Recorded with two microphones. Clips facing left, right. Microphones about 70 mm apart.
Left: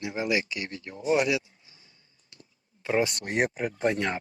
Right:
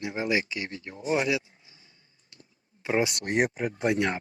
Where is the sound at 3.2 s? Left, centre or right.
Centre.